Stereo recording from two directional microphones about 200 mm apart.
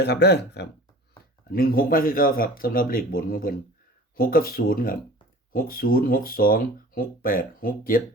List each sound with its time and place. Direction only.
0.0 s speech: 55° left (ahead or behind)